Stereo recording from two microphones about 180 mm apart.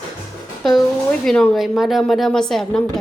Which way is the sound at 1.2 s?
5° left (ahead or behind).